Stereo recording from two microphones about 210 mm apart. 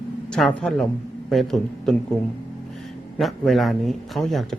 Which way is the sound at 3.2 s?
Centre (ahead or behind).